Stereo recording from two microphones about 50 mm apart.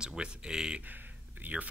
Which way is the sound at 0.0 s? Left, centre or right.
Centre.